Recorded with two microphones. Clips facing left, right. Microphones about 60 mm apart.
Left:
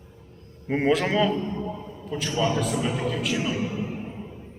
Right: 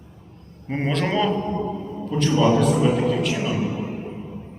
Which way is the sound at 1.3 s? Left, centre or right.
Right.